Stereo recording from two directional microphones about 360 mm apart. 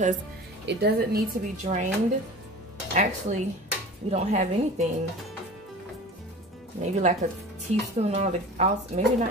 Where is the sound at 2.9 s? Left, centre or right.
Centre.